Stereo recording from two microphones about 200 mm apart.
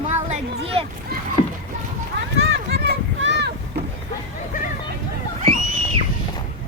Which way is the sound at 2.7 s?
60° right (ahead or behind).